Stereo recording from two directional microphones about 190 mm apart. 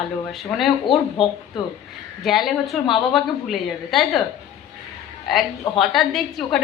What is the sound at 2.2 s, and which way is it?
A woman's voice, centre (ahead or behind).